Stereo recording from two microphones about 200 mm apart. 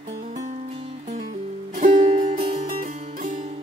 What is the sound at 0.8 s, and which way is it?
Music, 30° right (ahead or behind).